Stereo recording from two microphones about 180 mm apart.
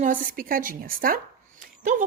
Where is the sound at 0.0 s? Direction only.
50° right (ahead or behind).